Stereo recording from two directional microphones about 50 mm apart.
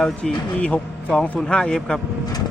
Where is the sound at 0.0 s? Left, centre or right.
Left.